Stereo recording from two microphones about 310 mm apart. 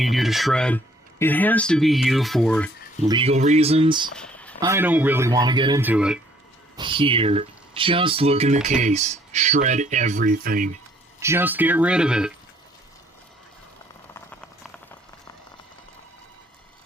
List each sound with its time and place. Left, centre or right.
0.0 s speech: centre
3.1 s speech: centre
4.1 s a sound: centre
4.6 s speech: centre
6.7 s speech: centre
11.2 s speech: centre
14.1 s clip-clop: centre